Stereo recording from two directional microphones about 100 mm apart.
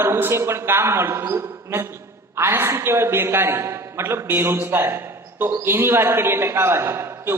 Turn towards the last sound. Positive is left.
turn(degrees=-25)  # may be behind; listen again after turning